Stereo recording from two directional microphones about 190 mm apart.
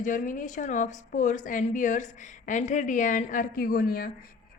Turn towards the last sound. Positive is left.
turn(degrees=50)  # may be behind; listen again after turning